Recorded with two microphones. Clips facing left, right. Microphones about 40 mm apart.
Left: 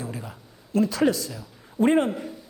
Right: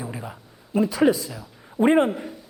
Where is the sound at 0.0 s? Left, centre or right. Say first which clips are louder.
Right 1 dB; centre.